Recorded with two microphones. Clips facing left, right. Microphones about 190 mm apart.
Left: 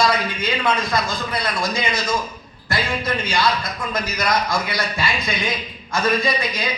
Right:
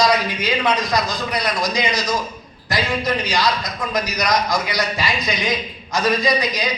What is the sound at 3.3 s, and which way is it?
A man's voice, 15° right (ahead or behind).